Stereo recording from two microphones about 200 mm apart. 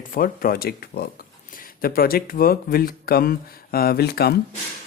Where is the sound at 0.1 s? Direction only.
45° left (ahead or behind).